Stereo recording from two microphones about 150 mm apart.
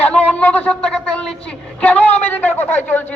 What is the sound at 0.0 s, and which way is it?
A man's voice, 10° left (ahead or behind).